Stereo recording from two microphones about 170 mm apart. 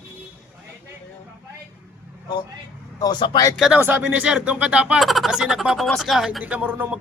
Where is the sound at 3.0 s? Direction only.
25° left (ahead or behind).